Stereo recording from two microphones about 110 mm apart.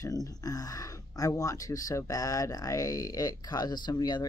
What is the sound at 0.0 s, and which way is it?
Speech, 35° left (ahead or behind).